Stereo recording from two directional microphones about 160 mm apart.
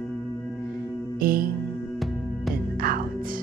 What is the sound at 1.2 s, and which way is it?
Music, 65° right (ahead or behind).